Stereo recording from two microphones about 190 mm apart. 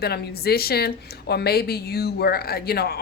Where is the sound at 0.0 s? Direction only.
55° left (ahead or behind).